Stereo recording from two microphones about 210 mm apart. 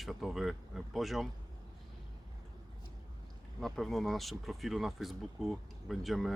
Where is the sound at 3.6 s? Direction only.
Centre (ahead or behind).